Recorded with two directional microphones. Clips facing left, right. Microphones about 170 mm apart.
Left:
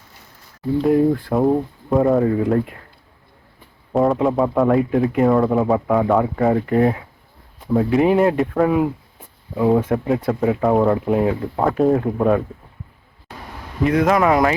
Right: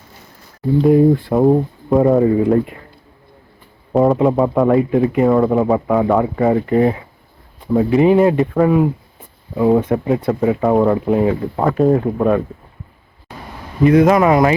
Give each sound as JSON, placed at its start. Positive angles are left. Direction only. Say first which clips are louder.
{"t": 0.8, "sound": "speech", "louder": "right 4 dB", "side_deg": -5}
{"t": 3.9, "sound": "speech", "louder": "right 4 dB", "side_deg": 0}
{"t": 14.0, "sound": "speech", "louder": "right 4 dB", "side_deg": -5}